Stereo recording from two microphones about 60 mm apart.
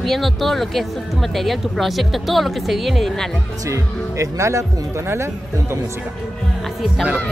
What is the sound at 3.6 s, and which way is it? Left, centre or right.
Speech, right.